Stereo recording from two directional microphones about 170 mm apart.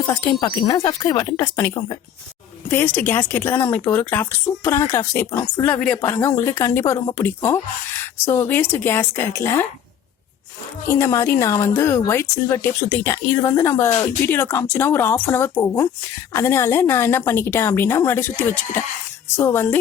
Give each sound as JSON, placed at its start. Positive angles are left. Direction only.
{"t": 0.3, "sound": "speech", "side_deg": 25}
{"t": 2.6, "sound": "speech", "side_deg": 10}
{"t": 10.8, "sound": "speech", "side_deg": 15}